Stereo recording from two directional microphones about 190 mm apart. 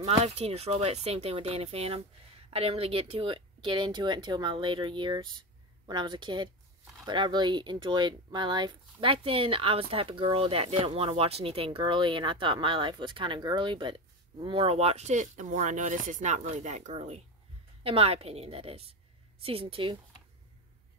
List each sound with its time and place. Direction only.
0.2 s speech: 35° right (ahead or behind)